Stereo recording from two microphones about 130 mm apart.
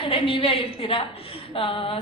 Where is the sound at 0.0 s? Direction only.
45° left (ahead or behind).